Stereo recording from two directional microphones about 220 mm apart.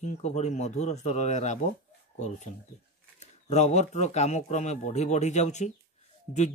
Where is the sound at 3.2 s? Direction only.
30° left (ahead or behind).